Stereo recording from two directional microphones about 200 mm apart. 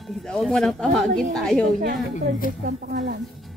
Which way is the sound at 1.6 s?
45° right (ahead or behind).